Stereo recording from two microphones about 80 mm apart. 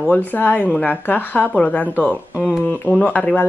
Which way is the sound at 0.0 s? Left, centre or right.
Left.